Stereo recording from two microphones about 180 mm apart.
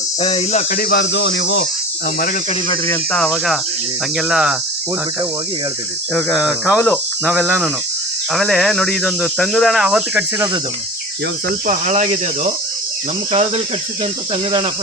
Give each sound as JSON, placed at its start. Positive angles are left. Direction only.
{"t": 0.2, "sound": "speech", "side_deg": 35}
{"t": 0.8, "sound": "speech", "side_deg": 65}
{"t": 2.8, "sound": "cricket", "side_deg": 10}
{"t": 4.2, "sound": "speech", "side_deg": -5}
{"t": 6.1, "sound": "speech", "side_deg": 0}
{"t": 11.4, "sound": "speech", "side_deg": -50}